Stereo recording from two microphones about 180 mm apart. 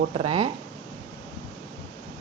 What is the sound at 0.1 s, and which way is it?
Speech, 30° right (ahead or behind).